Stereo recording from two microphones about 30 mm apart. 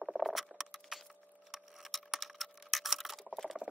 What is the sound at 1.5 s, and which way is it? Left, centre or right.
Keys jangling, centre.